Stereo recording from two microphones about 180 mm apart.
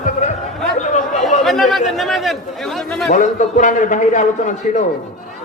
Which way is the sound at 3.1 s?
45° left (ahead or behind).